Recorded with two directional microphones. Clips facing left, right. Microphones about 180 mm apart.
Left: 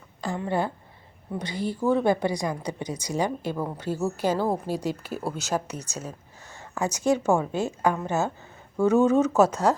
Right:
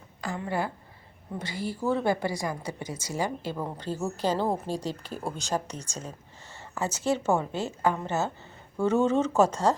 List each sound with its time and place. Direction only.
0.2 s a woman's voice: 25° left (ahead or behind); by 9.7 s 10° left (ahead or behind)